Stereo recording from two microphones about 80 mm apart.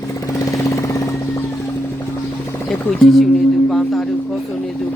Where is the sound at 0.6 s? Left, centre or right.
Left.